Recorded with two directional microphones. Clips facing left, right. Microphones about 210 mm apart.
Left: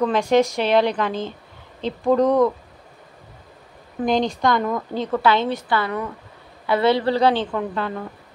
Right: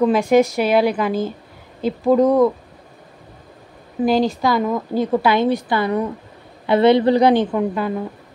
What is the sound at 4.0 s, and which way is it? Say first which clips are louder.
Speech: right 3 dB; 5° right (ahead or behind).